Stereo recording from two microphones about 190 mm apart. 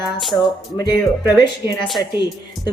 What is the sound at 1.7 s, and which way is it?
Speech, centre (ahead or behind).